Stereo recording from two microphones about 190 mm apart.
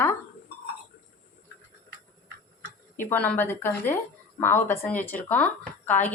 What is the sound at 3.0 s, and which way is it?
A woman's voice, 10° left (ahead or behind).